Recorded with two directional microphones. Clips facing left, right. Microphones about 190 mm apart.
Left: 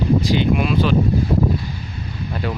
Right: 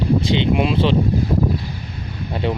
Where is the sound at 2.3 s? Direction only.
25° right (ahead or behind).